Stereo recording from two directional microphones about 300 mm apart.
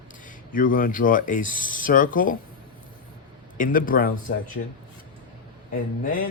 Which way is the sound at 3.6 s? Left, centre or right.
Left.